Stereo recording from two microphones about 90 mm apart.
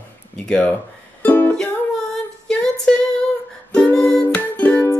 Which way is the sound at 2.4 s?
10° left (ahead or behind).